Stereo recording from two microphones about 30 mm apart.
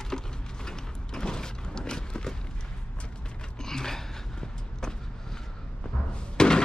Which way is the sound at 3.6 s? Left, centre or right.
Centre.